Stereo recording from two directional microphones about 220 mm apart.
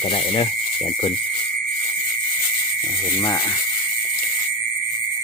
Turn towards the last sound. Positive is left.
turn(degrees=15)  # may be behind; listen again after turning